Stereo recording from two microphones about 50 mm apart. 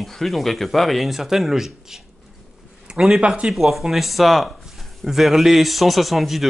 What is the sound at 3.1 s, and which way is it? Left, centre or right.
Speech, right.